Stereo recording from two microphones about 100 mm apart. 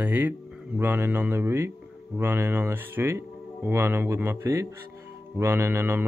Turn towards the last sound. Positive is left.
turn(degrees=-25)  # may be behind; listen again after turning